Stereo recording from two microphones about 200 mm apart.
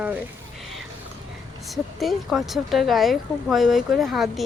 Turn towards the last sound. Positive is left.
turn(degrees=0)  # may be behind; listen again after turning